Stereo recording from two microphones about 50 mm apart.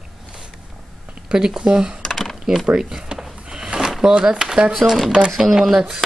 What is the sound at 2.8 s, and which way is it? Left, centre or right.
Drawer open or close, centre.